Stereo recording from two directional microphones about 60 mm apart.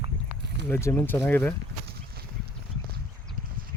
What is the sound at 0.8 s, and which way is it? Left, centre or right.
Speech, left.